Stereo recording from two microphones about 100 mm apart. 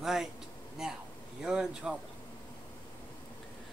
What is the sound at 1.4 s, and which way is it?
Speech, 10° right (ahead or behind).